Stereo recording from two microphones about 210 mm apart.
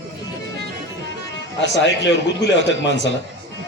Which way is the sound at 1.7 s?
60° left (ahead or behind).